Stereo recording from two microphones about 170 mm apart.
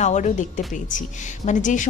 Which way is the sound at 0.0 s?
45° left (ahead or behind).